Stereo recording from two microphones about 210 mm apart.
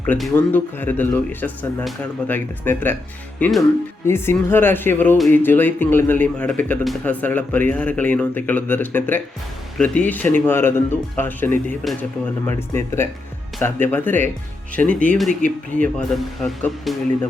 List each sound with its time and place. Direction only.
0.0 s speech: 5° left (ahead or behind)
12.5 s speech: 10° left (ahead or behind)